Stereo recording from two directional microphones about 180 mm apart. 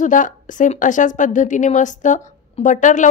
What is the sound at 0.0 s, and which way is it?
A woman's voice, 45° left (ahead or behind).